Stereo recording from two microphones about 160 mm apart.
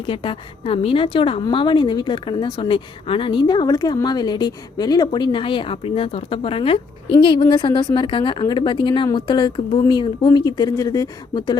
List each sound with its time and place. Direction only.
0.0 s a woman's voice: 30° left (ahead or behind)